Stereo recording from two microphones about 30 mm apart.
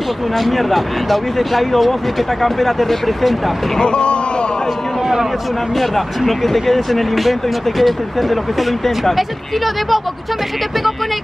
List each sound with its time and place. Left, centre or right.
0.4 s speech: centre
3.8 s a sound: left
5.8 s speech: centre